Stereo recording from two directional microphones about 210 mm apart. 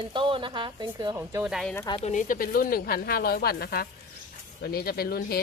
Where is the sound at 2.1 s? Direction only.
40° left (ahead or behind).